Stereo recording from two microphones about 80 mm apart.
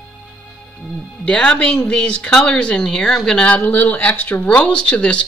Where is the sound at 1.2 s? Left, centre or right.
Centre.